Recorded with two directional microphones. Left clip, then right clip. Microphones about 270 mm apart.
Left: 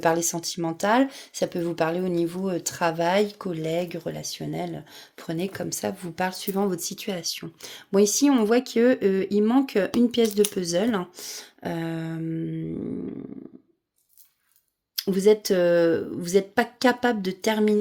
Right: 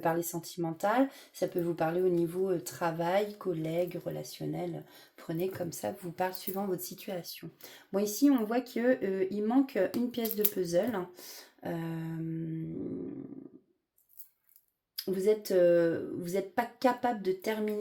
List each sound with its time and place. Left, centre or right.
0.0 s speech: left
14.9 s speech: left